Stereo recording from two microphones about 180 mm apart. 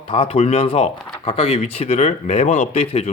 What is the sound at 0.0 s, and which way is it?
Speech, 30° left (ahead or behind).